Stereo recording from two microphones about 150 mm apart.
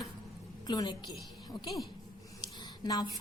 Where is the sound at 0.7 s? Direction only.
30° left (ahead or behind).